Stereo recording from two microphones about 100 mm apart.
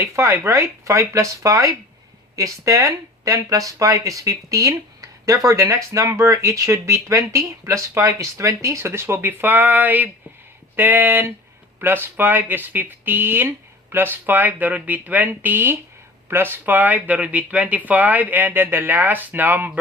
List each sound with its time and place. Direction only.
0.2 s speech: 25° right (ahead or behind)